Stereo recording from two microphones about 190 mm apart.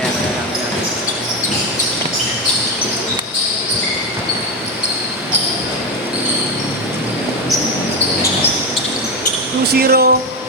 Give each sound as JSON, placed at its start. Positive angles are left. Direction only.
{"t": 9.7, "sound": "speech", "side_deg": -55}